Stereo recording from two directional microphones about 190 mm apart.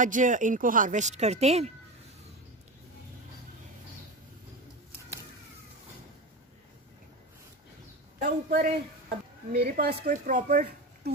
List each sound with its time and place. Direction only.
0.0 s a woman's voice: 40° right (ahead or behind)
8.2 s speech: 50° right (ahead or behind)